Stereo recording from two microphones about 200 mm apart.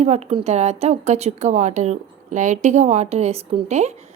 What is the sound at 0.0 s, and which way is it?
A woman's voice, 35° right (ahead or behind).